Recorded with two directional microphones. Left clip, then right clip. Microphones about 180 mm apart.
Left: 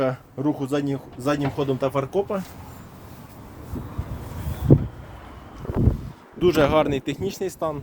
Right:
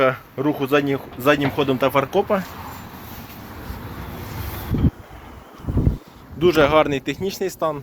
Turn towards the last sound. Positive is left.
turn(degrees=20)  # may be behind; listen again after turning